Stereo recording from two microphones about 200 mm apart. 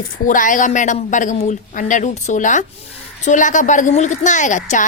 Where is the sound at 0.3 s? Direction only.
40° left (ahead or behind).